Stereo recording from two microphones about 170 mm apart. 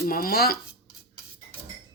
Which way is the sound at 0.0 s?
60° left (ahead or behind).